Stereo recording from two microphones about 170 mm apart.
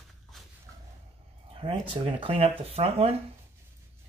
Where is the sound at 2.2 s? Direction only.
35° right (ahead or behind).